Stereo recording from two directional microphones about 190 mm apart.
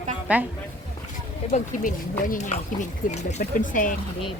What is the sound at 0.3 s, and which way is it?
Speech, 10° right (ahead or behind).